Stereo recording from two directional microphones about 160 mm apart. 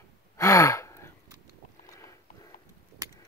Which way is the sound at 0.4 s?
20° left (ahead or behind).